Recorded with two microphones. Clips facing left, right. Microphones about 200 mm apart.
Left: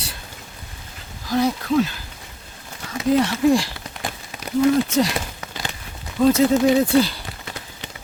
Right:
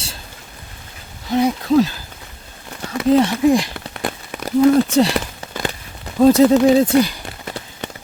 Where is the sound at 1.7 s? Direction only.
35° right (ahead or behind).